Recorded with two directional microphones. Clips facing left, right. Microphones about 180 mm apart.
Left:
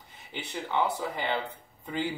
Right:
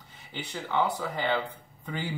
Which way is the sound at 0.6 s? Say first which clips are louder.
Right 1 dB; 20° left (ahead or behind).